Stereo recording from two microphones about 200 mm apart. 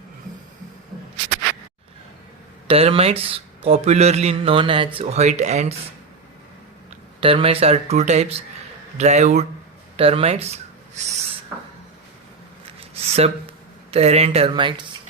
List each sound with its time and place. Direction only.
2.6 s a man's voice: 30° right (ahead or behind)
7.2 s speech: 30° right (ahead or behind)
12.9 s a sound: 30° right (ahead or behind)
13.9 s a man's voice: 30° right (ahead or behind)